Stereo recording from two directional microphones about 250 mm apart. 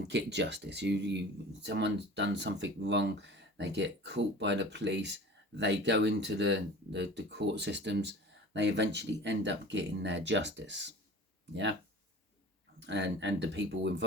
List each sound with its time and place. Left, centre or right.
0.1 s speech: right
12.8 s speech: right